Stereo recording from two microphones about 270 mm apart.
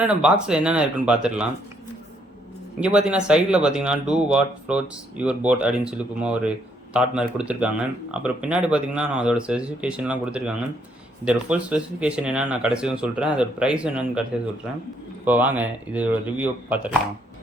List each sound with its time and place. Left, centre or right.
0.0 s speech: centre
2.8 s speech: centre